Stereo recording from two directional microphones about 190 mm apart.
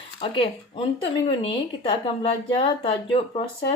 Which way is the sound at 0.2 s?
30° left (ahead or behind).